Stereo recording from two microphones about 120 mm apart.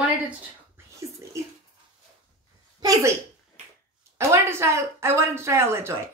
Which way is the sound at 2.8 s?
30° right (ahead or behind).